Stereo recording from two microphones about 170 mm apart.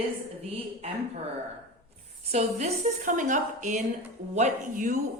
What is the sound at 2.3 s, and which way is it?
A woman's voice, 45° right (ahead or behind).